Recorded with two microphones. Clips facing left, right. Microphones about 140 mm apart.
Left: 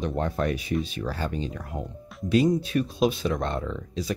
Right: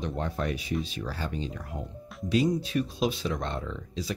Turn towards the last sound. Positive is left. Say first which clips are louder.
# left 4 dB
turn(degrees=50)  # may be behind; listen again after turning